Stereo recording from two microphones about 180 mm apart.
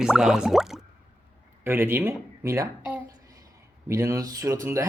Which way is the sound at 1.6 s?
10° right (ahead or behind).